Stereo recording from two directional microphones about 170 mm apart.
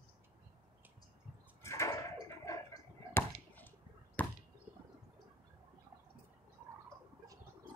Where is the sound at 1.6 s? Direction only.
15° left (ahead or behind).